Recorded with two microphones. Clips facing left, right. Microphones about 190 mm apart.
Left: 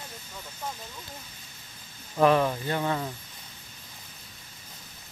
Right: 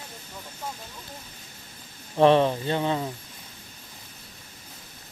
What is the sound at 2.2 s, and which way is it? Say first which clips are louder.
Speech: right 3 dB; 25° right (ahead or behind).